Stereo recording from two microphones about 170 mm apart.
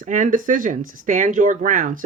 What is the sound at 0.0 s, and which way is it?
Speech, 50° right (ahead or behind).